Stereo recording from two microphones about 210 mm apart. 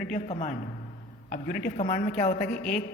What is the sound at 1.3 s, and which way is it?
A woman's voice, 45° left (ahead or behind).